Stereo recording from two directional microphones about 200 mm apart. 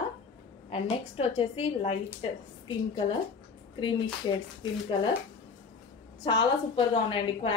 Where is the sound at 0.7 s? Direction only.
30° left (ahead or behind).